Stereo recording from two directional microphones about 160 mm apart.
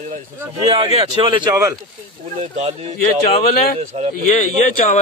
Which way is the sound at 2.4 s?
45° right (ahead or behind).